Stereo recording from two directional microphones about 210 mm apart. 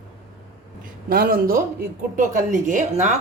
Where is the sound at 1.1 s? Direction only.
45° right (ahead or behind).